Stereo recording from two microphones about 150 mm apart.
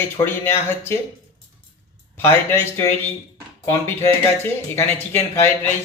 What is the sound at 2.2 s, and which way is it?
Speech, 15° left (ahead or behind).